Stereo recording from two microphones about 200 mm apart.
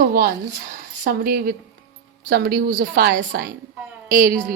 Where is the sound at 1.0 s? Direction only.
50° right (ahead or behind).